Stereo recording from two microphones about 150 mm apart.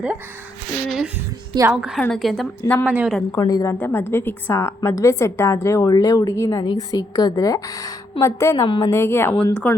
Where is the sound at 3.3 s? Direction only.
25° left (ahead or behind).